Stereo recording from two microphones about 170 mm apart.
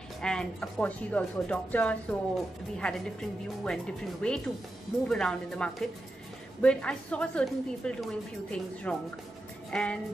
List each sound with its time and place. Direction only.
0.2 s a woman's voice: 5° left (ahead or behind)